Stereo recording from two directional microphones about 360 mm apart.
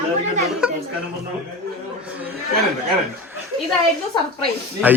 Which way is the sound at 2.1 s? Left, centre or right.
Centre.